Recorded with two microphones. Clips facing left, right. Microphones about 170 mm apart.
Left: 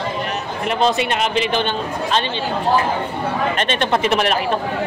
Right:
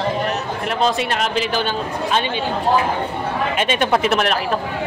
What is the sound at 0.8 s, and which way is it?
A man's voice, centre (ahead or behind).